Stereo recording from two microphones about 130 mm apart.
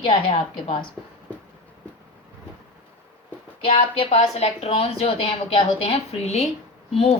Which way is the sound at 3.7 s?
45° left (ahead or behind).